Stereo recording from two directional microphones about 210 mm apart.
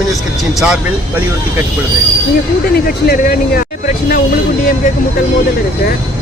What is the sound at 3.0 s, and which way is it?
Speech, 45° left (ahead or behind).